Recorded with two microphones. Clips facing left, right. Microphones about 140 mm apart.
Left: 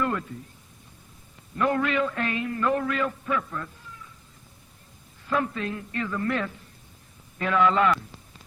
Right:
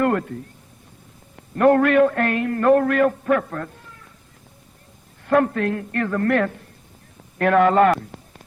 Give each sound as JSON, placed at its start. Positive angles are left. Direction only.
{"t": 0.0, "sound": "speech", "side_deg": -60}
{"t": 1.4, "sound": "a man's voice", "side_deg": -60}
{"t": 5.2, "sound": "a man's voice", "side_deg": -60}